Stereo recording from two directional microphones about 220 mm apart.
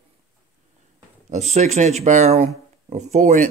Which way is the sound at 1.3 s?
30° right (ahead or behind).